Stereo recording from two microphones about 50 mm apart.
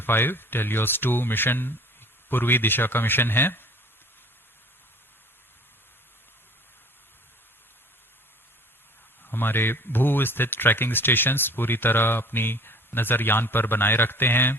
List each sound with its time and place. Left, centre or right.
0.0 s speech: left
9.2 s speech: left